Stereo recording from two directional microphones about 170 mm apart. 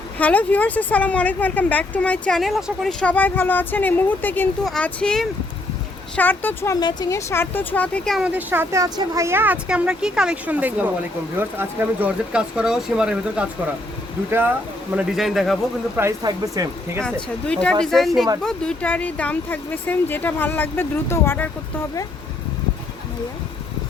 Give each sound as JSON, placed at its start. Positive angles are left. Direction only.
{"t": 0.2, "sound": "speech", "side_deg": 10}
{"t": 8.3, "sound": "speech", "side_deg": -10}
{"t": 14.9, "sound": "speech", "side_deg": 0}
{"t": 16.0, "sound": "speech", "side_deg": -20}
{"t": 17.4, "sound": "speech", "side_deg": 5}